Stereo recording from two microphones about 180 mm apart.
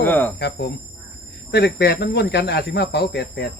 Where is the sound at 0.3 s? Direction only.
70° left (ahead or behind).